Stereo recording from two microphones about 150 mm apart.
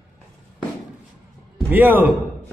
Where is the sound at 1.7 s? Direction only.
10° right (ahead or behind).